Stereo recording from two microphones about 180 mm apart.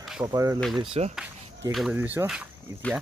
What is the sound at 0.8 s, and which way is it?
Speech, 35° right (ahead or behind).